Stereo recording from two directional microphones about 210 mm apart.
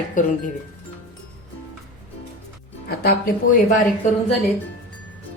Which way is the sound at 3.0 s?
45° left (ahead or behind).